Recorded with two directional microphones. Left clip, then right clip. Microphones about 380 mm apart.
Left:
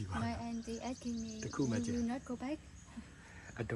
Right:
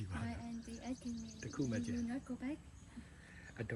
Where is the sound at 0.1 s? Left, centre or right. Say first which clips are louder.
Left 7 dB; centre.